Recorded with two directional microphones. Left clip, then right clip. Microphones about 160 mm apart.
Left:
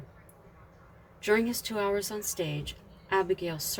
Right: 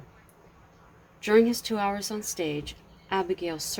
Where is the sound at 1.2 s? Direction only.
35° right (ahead or behind).